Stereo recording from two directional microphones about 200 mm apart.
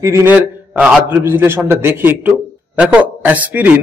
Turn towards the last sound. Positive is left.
turn(degrees=-10)  # may be behind; listen again after turning